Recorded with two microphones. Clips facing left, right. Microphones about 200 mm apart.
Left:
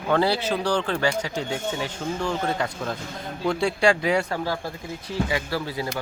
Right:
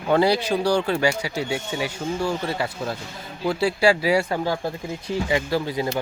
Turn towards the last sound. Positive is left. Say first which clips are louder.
# right 4 dB
turn(degrees=-20)  # may be behind; listen again after turning